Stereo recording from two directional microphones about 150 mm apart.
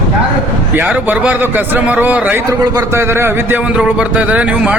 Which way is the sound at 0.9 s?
10° right (ahead or behind).